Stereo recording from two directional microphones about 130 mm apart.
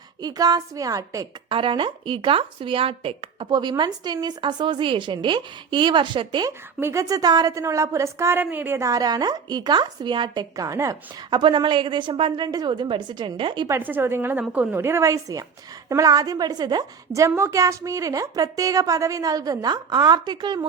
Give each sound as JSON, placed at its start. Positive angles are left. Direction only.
{"t": 0.2, "sound": "a woman's voice", "side_deg": -30}
{"t": 1.5, "sound": "a woman's voice", "side_deg": -40}
{"t": 6.7, "sound": "a woman's voice", "side_deg": -20}
{"t": 13.7, "sound": "a woman's voice", "side_deg": -15}
{"t": 17.2, "sound": "a woman's voice", "side_deg": -20}